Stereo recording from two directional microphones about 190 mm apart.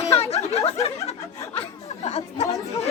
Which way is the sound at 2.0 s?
35° left (ahead or behind).